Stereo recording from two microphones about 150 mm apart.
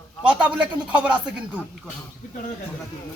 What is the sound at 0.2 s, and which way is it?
A man's voice, 10° right (ahead or behind).